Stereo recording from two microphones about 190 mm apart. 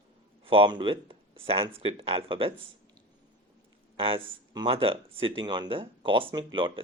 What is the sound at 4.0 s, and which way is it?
Speech, 30° right (ahead or behind).